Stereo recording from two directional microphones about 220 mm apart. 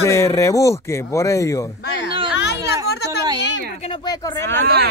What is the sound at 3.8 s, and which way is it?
Speech, 15° left (ahead or behind).